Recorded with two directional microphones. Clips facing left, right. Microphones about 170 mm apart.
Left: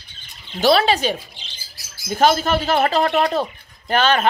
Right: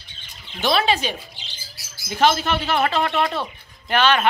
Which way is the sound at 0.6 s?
40° left (ahead or behind).